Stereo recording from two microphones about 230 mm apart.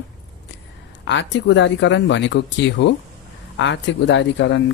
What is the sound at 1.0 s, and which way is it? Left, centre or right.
Speech, left.